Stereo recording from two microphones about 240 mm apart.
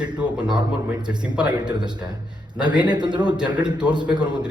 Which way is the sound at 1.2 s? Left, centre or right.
Centre.